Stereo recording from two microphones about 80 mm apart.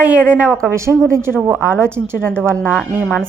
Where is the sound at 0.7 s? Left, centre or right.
Right.